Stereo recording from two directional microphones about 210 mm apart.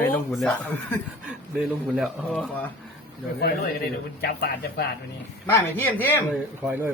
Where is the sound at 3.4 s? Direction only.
45° left (ahead or behind).